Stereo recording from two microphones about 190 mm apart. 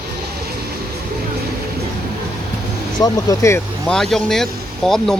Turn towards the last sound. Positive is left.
turn(degrees=0)  # may be behind; listen again after turning